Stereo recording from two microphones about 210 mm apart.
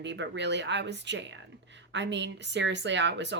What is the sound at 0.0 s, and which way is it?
Speech, 55° right (ahead or behind).